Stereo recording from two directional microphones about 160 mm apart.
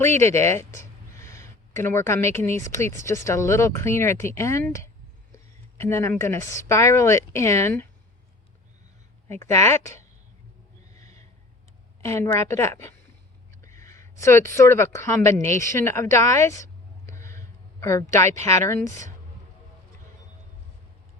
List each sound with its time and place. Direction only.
0.0 s speech: 15° left (ahead or behind)
10.9 s snort: 20° left (ahead or behind)
12.0 s a woman's voice: 15° left (ahead or behind)
17.1 s a sound: 20° left (ahead or behind)
18.3 s a woman's voice: 20° left (ahead or behind)